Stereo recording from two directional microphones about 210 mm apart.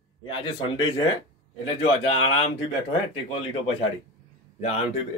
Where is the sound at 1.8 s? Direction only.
25° left (ahead or behind).